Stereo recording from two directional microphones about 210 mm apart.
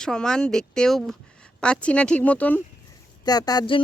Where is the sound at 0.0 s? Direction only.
5° left (ahead or behind).